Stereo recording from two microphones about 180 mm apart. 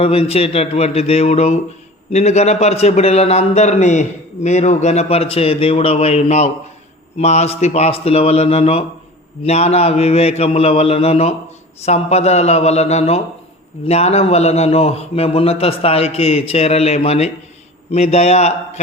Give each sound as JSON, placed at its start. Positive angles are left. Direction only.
{"t": 0.0, "sound": "a man's voice", "side_deg": 35}